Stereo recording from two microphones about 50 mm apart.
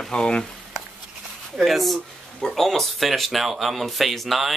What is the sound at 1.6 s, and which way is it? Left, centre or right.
Speech, centre.